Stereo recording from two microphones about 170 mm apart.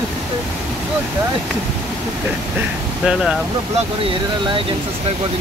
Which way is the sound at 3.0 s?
5° right (ahead or behind).